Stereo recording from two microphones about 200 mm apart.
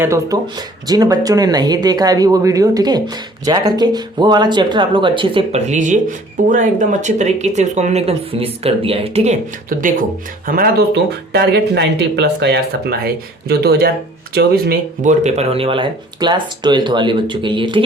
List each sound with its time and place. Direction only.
0.0 s speech: 15° right (ahead or behind); by 15.1 s 50° right (ahead or behind)
15.2 s speech: 30° right (ahead or behind)